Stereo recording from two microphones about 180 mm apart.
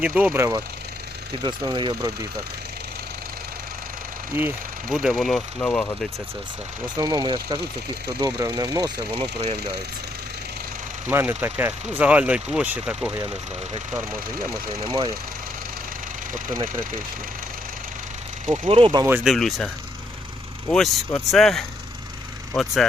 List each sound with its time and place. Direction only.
0.0 s speech: 10° right (ahead or behind)
4.3 s speech: 15° right (ahead or behind)
4.9 s speech: 5° left (ahead or behind)
6.8 s speech: 25° right (ahead or behind)
11.1 s speech: 15° right (ahead or behind)
18.5 s speech: 30° right (ahead or behind)
19.0 s speech: 10° right (ahead or behind)
19.3 s speech: centre (ahead or behind)